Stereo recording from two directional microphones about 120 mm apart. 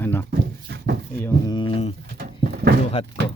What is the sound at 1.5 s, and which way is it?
Speech, 45° left (ahead or behind).